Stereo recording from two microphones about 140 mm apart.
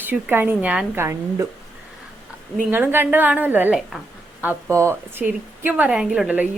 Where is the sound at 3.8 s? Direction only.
Centre (ahead or behind).